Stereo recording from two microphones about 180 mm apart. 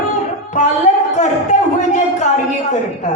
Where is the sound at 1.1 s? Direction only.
40° left (ahead or behind).